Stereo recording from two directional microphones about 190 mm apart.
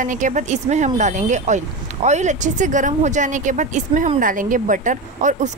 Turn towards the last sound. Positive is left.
turn(degrees=-40)  # may be behind; listen again after turning